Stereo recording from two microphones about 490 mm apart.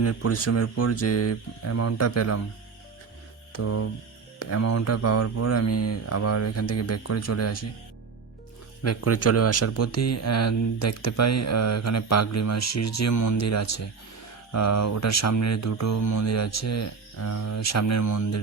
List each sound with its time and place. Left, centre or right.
0.0 s speech: left
3.5 s hum: left
4.4 s speech: left
8.8 s speech: left